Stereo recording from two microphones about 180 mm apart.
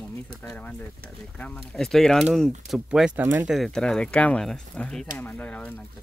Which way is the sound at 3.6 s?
5° left (ahead or behind).